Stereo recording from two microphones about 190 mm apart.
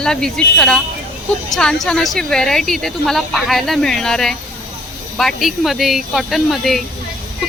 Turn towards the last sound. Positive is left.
turn(degrees=0)  # may be behind; listen again after turning